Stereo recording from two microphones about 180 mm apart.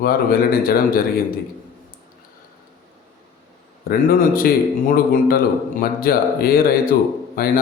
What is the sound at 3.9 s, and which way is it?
A man's voice, 55° left (ahead or behind).